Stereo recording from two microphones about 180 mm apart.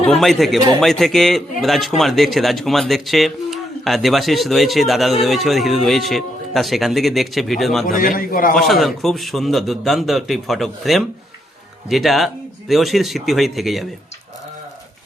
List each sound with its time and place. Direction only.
0.1 s speech: centre (ahead or behind)
7.9 s a man's voice: 50° left (ahead or behind)
8.5 s speech: centre (ahead or behind)